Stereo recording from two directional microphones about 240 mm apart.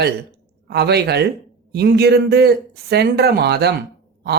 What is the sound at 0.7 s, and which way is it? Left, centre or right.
Speech, right.